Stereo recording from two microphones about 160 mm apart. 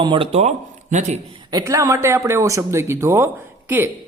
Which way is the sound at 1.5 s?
20° right (ahead or behind).